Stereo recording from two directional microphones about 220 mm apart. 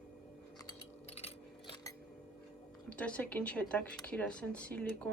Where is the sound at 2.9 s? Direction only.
5° left (ahead or behind).